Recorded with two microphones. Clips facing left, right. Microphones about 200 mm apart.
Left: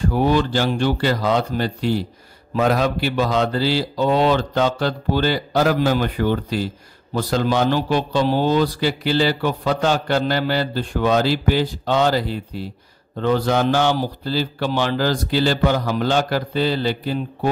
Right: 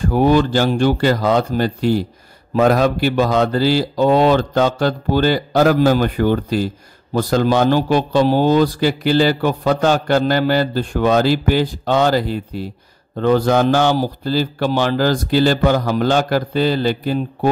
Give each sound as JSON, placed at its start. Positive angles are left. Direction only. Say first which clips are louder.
{"t": 0.1, "sound": "a man's voice", "louder": "right 6 dB", "side_deg": -45}